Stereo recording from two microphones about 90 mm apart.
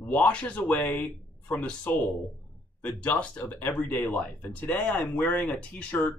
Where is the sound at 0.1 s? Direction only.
15° left (ahead or behind).